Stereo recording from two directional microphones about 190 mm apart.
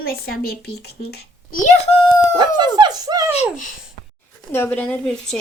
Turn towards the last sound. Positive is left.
turn(degrees=5)  # may be behind; listen again after turning